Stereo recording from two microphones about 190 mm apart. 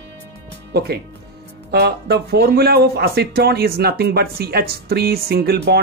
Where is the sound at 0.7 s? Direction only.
55° right (ahead or behind).